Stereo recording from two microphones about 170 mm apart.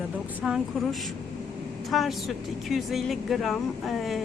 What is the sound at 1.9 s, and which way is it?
Speech, centre (ahead or behind).